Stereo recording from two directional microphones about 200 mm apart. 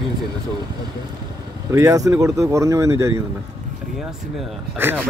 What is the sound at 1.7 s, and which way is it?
Speech, 15° right (ahead or behind).